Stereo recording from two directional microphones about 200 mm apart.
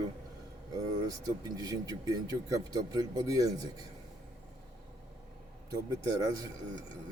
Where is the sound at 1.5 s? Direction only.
15° right (ahead or behind).